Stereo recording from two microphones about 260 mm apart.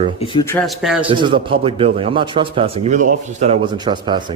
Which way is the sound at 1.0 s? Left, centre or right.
Centre.